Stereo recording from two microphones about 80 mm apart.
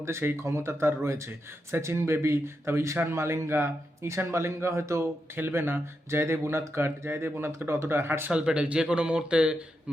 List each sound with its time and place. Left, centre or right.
0.0 s speech: right
8.3 s speech: centre